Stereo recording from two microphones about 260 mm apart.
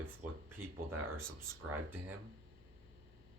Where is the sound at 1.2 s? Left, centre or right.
Right.